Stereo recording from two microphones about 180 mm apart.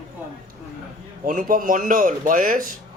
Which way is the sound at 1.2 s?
50° right (ahead or behind).